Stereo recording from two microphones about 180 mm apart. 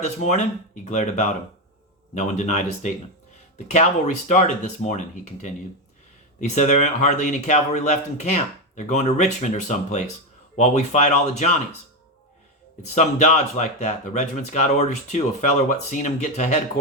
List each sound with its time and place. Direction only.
0.0 s speech: 40° left (ahead or behind)
12.9 s speech: 40° left (ahead or behind)